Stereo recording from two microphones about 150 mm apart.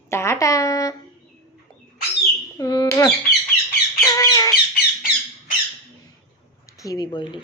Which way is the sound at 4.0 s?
25° left (ahead or behind).